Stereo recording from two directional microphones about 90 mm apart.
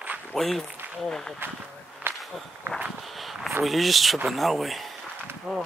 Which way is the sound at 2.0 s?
20° right (ahead or behind).